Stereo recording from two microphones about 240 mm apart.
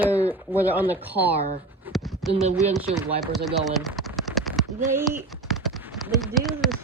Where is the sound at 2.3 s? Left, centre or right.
Right.